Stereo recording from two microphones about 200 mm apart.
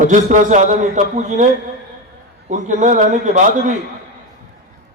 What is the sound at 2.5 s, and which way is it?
A man's voice, 40° right (ahead or behind).